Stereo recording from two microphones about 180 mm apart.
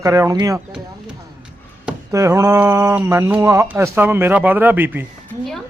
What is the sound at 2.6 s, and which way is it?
A man's voice, 15° right (ahead or behind).